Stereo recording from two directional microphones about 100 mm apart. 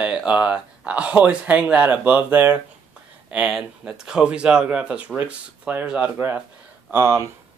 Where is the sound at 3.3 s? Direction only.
5° right (ahead or behind).